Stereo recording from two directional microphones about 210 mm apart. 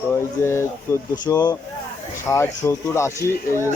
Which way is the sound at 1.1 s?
20° left (ahead or behind).